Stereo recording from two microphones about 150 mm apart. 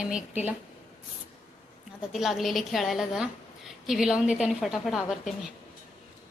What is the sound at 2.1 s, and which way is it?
A woman's voice, centre (ahead or behind).